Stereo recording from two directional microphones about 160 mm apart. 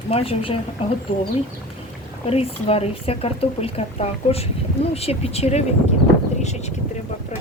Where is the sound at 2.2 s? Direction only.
40° left (ahead or behind).